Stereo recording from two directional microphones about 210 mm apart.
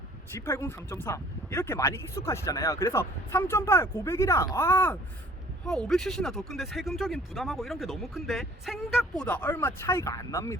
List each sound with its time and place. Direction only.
0.3 s speech: 10° left (ahead or behind)